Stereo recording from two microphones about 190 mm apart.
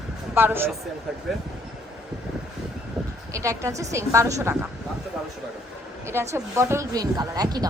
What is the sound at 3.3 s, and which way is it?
A woman's voice, 15° right (ahead or behind).